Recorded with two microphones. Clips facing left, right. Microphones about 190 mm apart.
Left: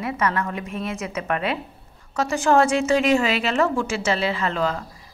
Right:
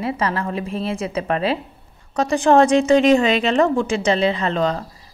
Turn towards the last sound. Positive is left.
turn(degrees=-30)  # may be behind; listen again after turning